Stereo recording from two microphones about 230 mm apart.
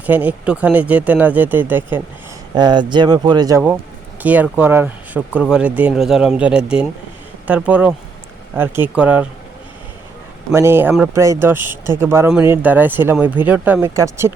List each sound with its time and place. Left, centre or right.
0.0 s speech: centre
2.6 s speech: centre
4.2 s speech: centre
10.5 s speech: centre